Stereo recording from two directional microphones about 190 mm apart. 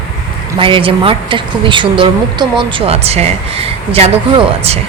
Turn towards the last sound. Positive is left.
turn(degrees=-30)  # may be behind; listen again after turning